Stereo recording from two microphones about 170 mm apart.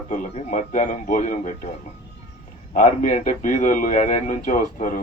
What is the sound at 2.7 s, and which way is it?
A man's voice, 50° left (ahead or behind).